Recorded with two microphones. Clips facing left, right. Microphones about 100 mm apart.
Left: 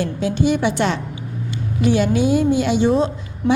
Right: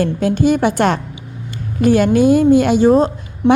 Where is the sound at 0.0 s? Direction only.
50° right (ahead or behind).